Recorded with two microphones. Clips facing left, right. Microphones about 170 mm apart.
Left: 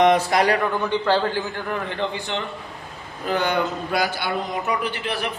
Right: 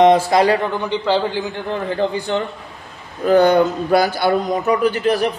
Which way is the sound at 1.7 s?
35° right (ahead or behind).